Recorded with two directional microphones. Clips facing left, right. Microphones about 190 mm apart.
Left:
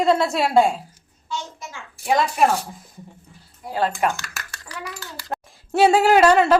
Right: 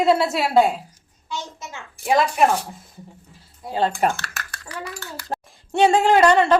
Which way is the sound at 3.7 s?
25° right (ahead or behind).